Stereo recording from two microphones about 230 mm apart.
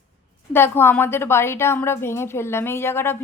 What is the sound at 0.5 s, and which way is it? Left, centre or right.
Speech, centre.